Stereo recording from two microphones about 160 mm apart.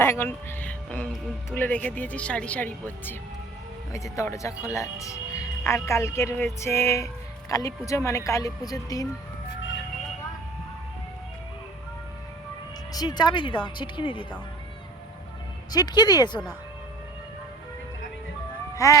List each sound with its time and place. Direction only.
0.0 s a sound: 15° left (ahead or behind)
1.5 s speech: 10° left (ahead or behind)
12.9 s speech: 25° left (ahead or behind)
15.7 s speech: 25° left (ahead or behind)
18.8 s speech: 20° left (ahead or behind)